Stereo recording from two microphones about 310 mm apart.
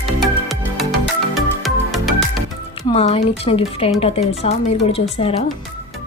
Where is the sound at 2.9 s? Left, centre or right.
Centre.